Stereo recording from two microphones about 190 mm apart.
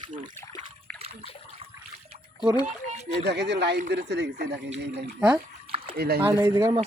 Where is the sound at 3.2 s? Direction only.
65° right (ahead or behind).